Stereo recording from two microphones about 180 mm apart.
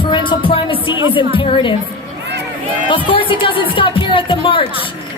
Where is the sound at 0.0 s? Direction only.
25° left (ahead or behind).